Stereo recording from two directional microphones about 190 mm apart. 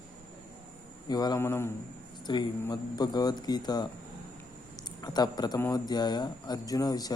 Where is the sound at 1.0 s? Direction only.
20° left (ahead or behind).